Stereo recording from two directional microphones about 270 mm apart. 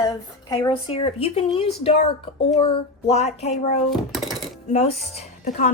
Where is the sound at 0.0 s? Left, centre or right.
Centre.